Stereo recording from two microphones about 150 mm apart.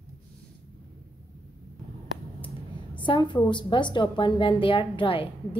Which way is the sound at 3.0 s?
30° left (ahead or behind).